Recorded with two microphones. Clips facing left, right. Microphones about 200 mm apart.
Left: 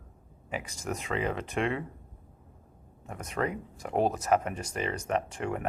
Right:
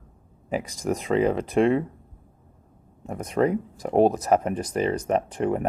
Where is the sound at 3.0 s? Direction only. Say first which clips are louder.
Right 9 dB; 35° right (ahead or behind).